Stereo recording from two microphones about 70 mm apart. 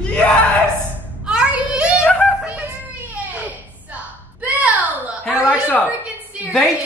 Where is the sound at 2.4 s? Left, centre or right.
Centre.